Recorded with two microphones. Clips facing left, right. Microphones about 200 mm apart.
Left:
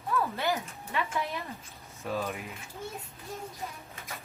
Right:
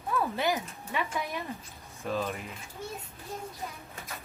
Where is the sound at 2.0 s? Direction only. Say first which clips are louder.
Right 1 dB; centre (ahead or behind).